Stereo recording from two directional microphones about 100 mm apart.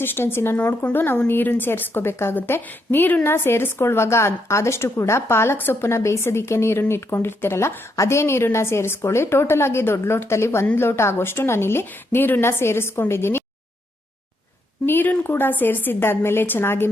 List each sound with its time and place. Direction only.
0.0 s a woman's voice: 20° left (ahead or behind)
14.8 s a woman's voice: 20° left (ahead or behind)